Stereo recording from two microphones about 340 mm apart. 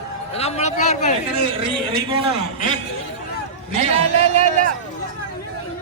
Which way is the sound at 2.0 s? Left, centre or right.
Centre.